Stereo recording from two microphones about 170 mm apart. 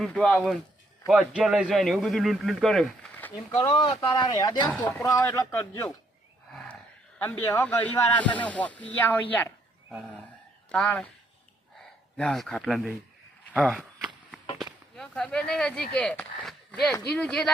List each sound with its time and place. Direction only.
0.0 s a man's voice: 5° left (ahead or behind)
3.2 s a sound: 10° left (ahead or behind)
3.6 s speech: 25° left (ahead or behind)
7.2 s speech: 15° left (ahead or behind)
10.7 s a man's voice: 5° left (ahead or behind)
12.1 s a man's voice: 5° left (ahead or behind)
13.5 s a sound: centre (ahead or behind)
14.6 s a man's voice: 5° left (ahead or behind)